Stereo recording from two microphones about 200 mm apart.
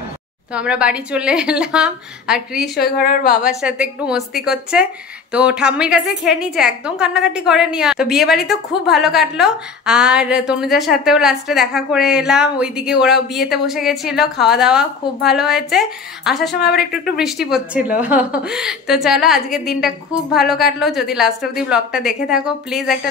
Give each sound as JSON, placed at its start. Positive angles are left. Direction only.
{"t": 0.5, "sound": "a woman's voice", "side_deg": -5}
{"t": 2.8, "sound": "a woman's voice", "side_deg": 50}
{"t": 3.4, "sound": "a woman's voice", "side_deg": -5}